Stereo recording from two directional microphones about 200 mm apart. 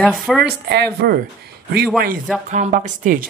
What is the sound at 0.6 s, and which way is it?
Speech, 55° right (ahead or behind).